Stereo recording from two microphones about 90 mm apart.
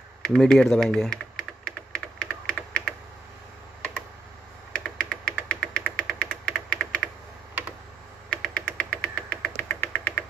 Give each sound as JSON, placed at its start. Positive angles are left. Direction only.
{"t": 0.2, "sound": "typing", "side_deg": 5}
{"t": 4.7, "sound": "knock", "side_deg": 10}
{"t": 8.3, "sound": "knock", "side_deg": 10}
{"t": 9.6, "sound": "knock", "side_deg": 25}